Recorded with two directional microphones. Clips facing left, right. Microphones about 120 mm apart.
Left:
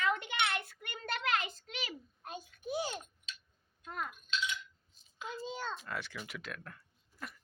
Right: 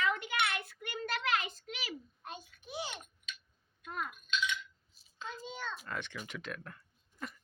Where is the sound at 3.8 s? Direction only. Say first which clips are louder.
Right 1 dB; 30° left (ahead or behind).